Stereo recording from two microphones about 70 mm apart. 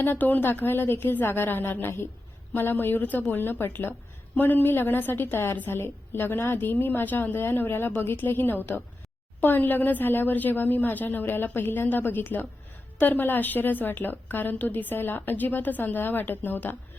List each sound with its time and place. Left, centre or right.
0.0 s a woman's voice: left